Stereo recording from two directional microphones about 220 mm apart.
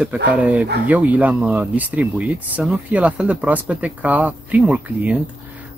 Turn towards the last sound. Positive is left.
turn(degrees=-5)  # may be behind; listen again after turning